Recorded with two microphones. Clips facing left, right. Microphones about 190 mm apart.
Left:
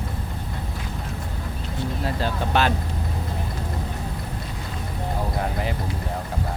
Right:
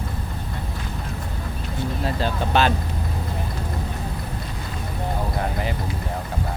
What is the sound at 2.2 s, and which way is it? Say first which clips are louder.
Speech: right 2 dB; 25° right (ahead or behind).